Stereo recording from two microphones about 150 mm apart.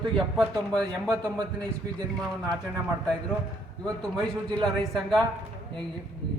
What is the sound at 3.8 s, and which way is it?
A man's voice, 5° left (ahead or behind).